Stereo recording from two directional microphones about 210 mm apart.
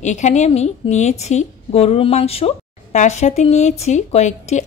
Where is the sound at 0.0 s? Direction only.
35° left (ahead or behind).